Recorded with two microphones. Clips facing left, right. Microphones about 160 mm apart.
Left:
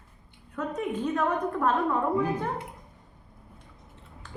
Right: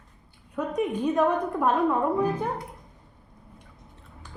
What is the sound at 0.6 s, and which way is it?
A woman's voice, 15° right (ahead or behind).